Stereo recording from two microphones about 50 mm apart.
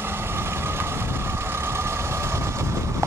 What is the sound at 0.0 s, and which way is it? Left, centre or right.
Vehicle, right.